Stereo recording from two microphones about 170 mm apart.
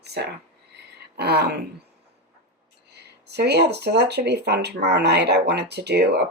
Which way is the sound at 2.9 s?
75° right (ahead or behind).